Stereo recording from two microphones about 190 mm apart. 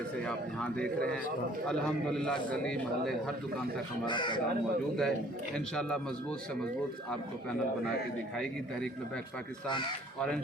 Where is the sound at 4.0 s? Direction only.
25° left (ahead or behind).